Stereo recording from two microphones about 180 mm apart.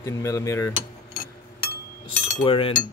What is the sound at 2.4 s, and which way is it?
Chink, 30° left (ahead or behind).